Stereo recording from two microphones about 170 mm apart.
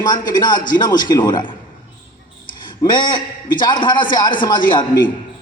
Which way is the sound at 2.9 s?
25° left (ahead or behind).